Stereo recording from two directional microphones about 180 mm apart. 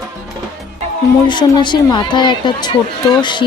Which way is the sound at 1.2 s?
25° left (ahead or behind).